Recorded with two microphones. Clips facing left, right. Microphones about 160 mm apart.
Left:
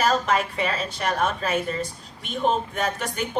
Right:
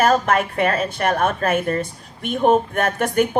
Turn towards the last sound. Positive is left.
turn(degrees=-55)  # may be behind; listen again after turning